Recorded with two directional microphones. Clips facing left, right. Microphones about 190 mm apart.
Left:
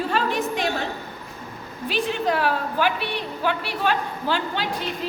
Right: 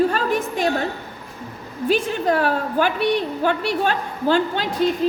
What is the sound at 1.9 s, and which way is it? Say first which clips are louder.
A woman's voice: right 4 dB; 45° right (ahead or behind).